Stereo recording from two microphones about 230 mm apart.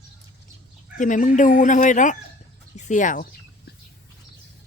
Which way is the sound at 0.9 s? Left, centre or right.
Left.